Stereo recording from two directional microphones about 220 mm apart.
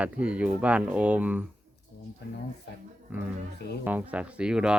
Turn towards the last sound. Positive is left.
turn(degrees=-5)  # may be behind; listen again after turning